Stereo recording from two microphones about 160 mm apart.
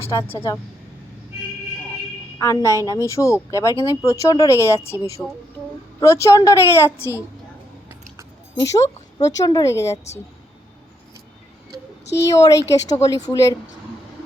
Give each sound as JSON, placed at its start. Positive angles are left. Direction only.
{"t": 0.1, "sound": "a woman's voice", "side_deg": 20}
{"t": 2.4, "sound": "a woman's voice", "side_deg": 20}
{"t": 8.5, "sound": "a woman's voice", "side_deg": 20}
{"t": 12.2, "sound": "a woman's voice", "side_deg": 20}